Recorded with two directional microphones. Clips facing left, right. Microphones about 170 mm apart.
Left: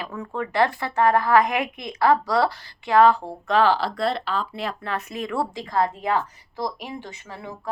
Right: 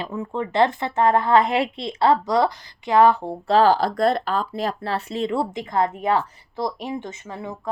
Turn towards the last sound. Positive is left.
turn(degrees=-20)  # may be behind; listen again after turning